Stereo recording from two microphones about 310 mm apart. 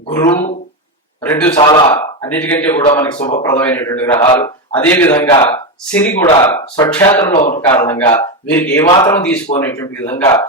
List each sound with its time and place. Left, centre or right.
0.1 s speech: centre
7.3 s speech: left